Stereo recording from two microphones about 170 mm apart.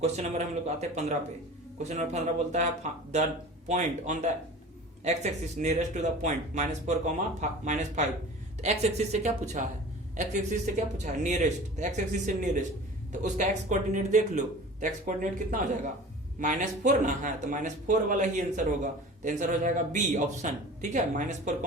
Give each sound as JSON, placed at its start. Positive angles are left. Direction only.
{"t": 0.0, "sound": "speech", "side_deg": -40}